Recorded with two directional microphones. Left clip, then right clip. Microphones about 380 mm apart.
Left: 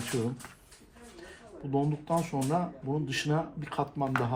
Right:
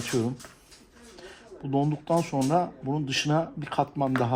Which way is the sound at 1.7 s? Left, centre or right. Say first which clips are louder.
Right 4 dB; right.